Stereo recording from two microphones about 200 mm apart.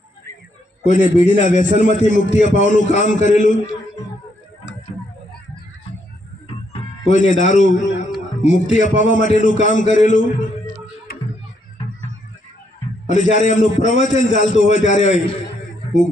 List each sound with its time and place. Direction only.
0.9 s a man's voice: 40° left (ahead or behind)
6.7 s a man's voice: 40° left (ahead or behind)
11.1 s a sound: 50° left (ahead or behind)
13.1 s a man's voice: 40° left (ahead or behind)